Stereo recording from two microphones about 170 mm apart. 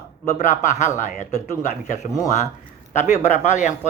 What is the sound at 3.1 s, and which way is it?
Speech, 45° left (ahead or behind).